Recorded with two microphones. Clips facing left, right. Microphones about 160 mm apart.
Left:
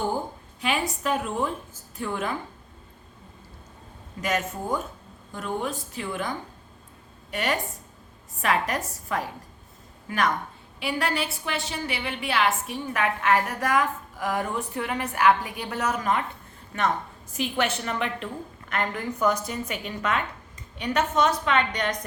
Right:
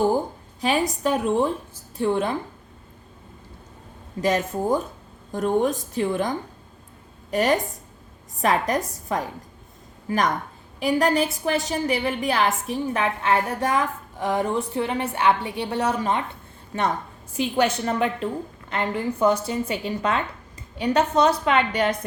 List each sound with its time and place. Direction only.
0.6 s a woman's voice: 35° right (ahead or behind)
4.2 s a woman's voice: 35° right (ahead or behind)
17.3 s a woman's voice: 35° right (ahead or behind)